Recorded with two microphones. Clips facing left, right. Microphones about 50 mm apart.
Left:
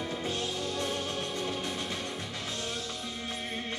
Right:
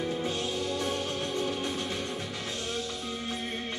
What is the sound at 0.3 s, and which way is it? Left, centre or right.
Music, right.